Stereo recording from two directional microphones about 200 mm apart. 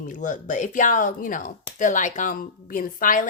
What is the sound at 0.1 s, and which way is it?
A woman's voice, 40° left (ahead or behind).